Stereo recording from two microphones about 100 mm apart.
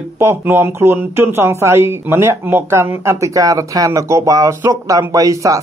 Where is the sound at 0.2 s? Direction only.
25° right (ahead or behind).